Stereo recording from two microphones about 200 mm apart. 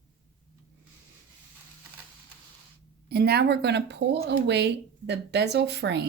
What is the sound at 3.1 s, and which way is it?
Speech, 55° right (ahead or behind).